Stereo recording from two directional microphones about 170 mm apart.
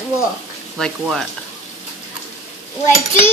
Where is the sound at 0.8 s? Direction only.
Centre (ahead or behind).